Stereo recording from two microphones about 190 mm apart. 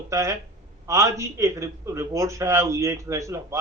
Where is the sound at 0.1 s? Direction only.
15° right (ahead or behind).